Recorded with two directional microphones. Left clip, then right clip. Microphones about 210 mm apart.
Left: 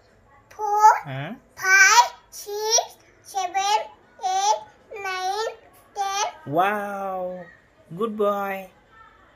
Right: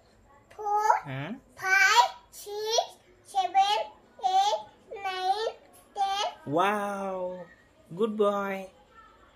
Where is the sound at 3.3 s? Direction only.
15° right (ahead or behind).